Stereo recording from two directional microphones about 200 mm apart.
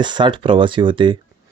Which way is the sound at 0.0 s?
25° right (ahead or behind).